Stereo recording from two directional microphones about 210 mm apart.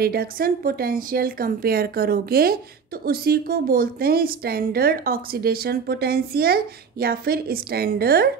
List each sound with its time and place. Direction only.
0.0 s a woman's voice: 45° right (ahead or behind)